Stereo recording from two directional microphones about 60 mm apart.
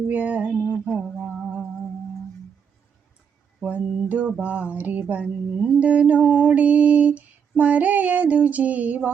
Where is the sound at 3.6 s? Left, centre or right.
Centre.